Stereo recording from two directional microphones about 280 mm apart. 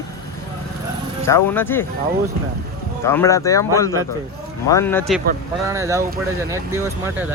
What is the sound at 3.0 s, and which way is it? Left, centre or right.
Speech, centre.